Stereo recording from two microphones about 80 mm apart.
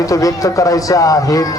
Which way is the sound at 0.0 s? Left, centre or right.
Left.